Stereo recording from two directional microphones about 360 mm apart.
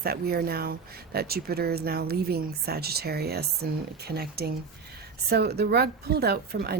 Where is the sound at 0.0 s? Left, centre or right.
Right.